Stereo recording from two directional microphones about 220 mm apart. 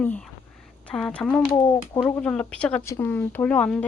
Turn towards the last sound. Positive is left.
turn(degrees=5)  # may be behind; listen again after turning